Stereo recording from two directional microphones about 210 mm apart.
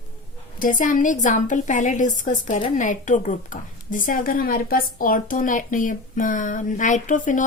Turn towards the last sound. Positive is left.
turn(degrees=40)  # may be behind; listen again after turning